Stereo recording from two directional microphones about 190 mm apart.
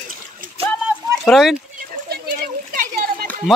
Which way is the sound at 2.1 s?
50° right (ahead or behind).